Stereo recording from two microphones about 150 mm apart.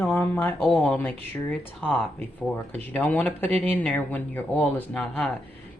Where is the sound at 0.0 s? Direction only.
10° left (ahead or behind).